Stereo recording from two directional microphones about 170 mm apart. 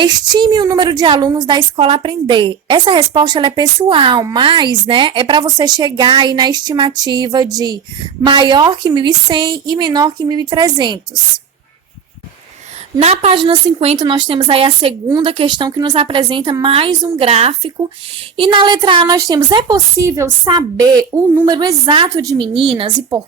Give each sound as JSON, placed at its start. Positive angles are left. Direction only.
{"t": 0.0, "sound": "a woman's voice", "side_deg": -25}
{"t": 13.0, "sound": "a woman's voice", "side_deg": -40}